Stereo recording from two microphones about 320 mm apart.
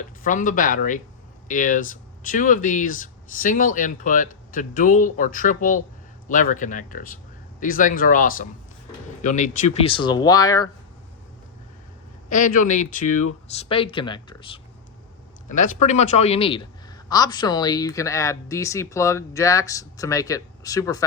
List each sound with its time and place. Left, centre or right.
0.0 s a man's voice: left
12.3 s a man's voice: left